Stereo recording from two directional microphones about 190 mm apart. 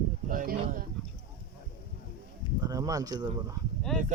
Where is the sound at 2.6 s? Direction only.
20° right (ahead or behind).